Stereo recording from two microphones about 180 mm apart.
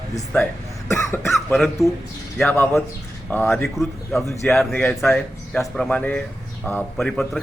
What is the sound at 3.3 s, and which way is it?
A man's voice, 10° left (ahead or behind).